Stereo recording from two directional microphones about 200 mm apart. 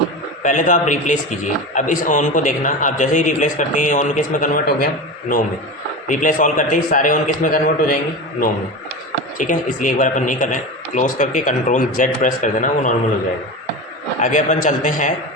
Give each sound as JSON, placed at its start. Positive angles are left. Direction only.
{"t": 0.4, "sound": "a man's voice", "side_deg": 40}
{"t": 6.1, "sound": "a man's voice", "side_deg": 40}
{"t": 9.4, "sound": "a man's voice", "side_deg": 40}
{"t": 14.2, "sound": "a man's voice", "side_deg": 40}